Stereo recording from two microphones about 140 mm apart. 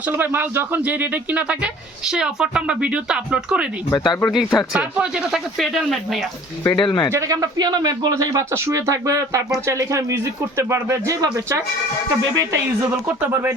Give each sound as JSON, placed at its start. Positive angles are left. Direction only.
{"t": 0.0, "sound": "speech", "side_deg": -15}
{"t": 3.8, "sound": "speech", "side_deg": 25}
{"t": 4.3, "sound": "speech", "side_deg": 0}
{"t": 6.7, "sound": "speech", "side_deg": 30}
{"t": 7.1, "sound": "speech", "side_deg": -25}